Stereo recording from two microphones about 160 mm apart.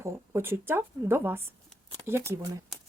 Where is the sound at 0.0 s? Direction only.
15° right (ahead or behind).